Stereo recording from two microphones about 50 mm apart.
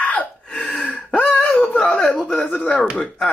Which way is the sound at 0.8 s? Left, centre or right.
Left.